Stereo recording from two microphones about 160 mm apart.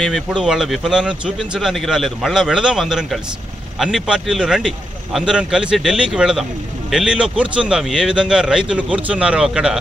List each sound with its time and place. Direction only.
0.0 s speech: centre (ahead or behind)